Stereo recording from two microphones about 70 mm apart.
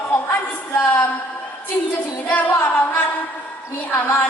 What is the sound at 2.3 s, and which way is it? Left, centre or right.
A woman's voice, left.